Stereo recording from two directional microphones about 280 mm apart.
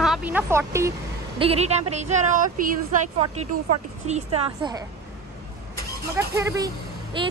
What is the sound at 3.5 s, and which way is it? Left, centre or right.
Speech, right.